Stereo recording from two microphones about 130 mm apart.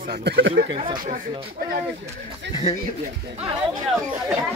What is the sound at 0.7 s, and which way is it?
Speech, 40° right (ahead or behind).